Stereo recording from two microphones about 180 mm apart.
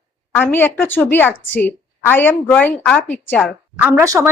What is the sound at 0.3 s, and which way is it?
A woman's voice, 10° left (ahead or behind).